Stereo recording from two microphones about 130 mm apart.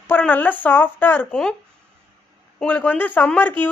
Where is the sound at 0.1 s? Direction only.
15° left (ahead or behind).